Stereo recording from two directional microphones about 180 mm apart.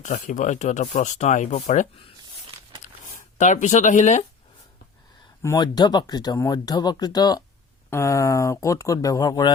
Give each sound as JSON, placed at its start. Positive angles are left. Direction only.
{"t": 0.0, "sound": "speech", "side_deg": 45}
{"t": 5.4, "sound": "speech", "side_deg": 20}